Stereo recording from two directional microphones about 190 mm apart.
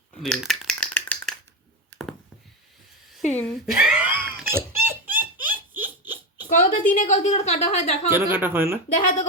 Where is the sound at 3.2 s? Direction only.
5° left (ahead or behind).